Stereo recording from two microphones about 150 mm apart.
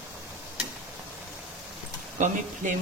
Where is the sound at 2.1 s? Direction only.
55° right (ahead or behind).